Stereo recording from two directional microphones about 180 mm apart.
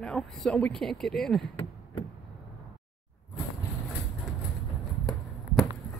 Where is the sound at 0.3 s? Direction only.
Centre (ahead or behind).